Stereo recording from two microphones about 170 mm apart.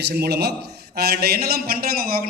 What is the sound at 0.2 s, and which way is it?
A man's voice, 70° right (ahead or behind).